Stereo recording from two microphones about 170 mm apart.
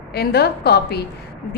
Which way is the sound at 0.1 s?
70° left (ahead or behind).